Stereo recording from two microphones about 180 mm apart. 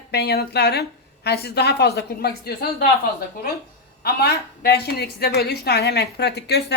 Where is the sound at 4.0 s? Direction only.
60° left (ahead or behind).